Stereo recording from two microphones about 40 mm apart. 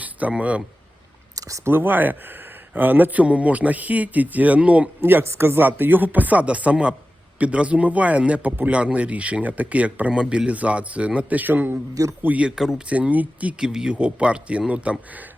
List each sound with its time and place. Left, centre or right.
0.0 s a sound: right
0.3 s a man's voice: right
1.6 s a man's voice: right
5.0 s speech: right
5.6 s a man's voice: right
11.3 s speech: right
12.5 s speech: centre
12.9 s a man's voice: right
13.6 s a man's voice: centre; by 15.2 s right